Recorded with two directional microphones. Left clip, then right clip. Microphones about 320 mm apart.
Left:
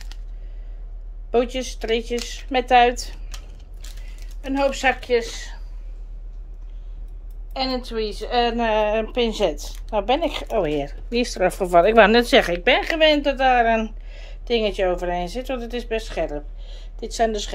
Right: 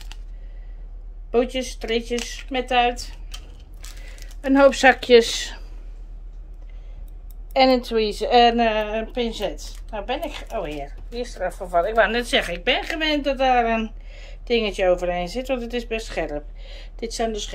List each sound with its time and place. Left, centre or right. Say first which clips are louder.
1.3 s a woman's voice: even; centre
2.6 s speech: left 4 dB; centre
4.2 s speech: right 7 dB; centre
7.5 s a woman's voice: right 8 dB; centre